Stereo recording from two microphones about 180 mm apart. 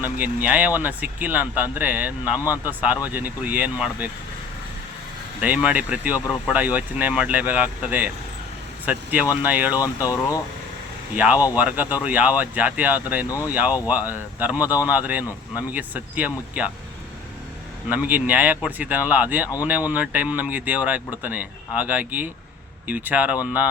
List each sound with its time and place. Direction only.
0.0 s speech: 10° right (ahead or behind)
5.4 s speech: 10° right (ahead or behind)
9.7 s speech: 20° left (ahead or behind)
11.1 s speech: 10° right (ahead or behind)
13.2 s speech: 20° left (ahead or behind)
13.5 s speech: 10° right (ahead or behind)
17.8 s speech: 10° right (ahead or behind)